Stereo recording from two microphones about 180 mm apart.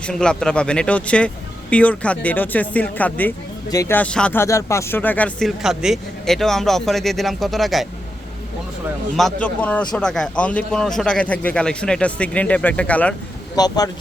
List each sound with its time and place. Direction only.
0.0 s a man's voice: 5° left (ahead or behind)
9.1 s a man's voice: 5° left (ahead or behind)
13.6 s speech: 20° left (ahead or behind)